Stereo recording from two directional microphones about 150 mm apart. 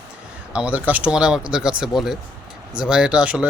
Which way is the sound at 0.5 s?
10° right (ahead or behind).